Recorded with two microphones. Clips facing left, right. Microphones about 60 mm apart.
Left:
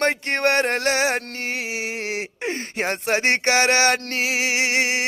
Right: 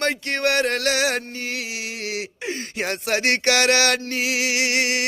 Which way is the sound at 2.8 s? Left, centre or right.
Left.